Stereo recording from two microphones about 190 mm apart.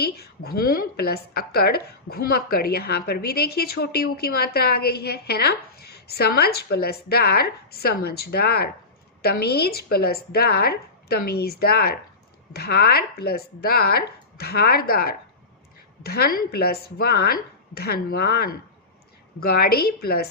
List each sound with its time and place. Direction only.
0.0 s a woman's voice: 55° left (ahead or behind)